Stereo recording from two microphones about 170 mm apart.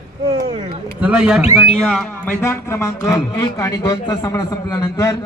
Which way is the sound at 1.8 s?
5° left (ahead or behind).